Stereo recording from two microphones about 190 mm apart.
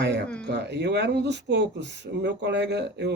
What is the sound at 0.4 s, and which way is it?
Speech, 65° right (ahead or behind).